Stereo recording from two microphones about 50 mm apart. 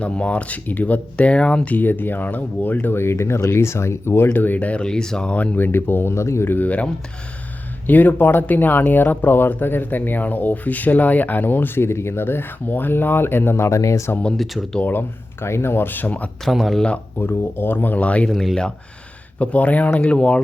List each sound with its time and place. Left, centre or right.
0.0 s speech: left
2.9 s speech: left
4.3 s speech: left
4.8 s speech: centre
5.3 s speech: left
5.5 s speech: left
6.5 s speech: left
7.9 s speech: left
14.8 s speech: left
15.4 s speech: left
16.4 s speech: centre
17.2 s speech: left
18.0 s speech: left
19.4 s speech: left